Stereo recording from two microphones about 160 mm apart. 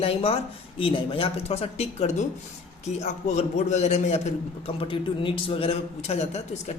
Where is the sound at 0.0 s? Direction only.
35° left (ahead or behind).